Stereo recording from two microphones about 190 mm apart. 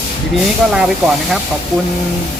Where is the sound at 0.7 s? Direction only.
5° right (ahead or behind).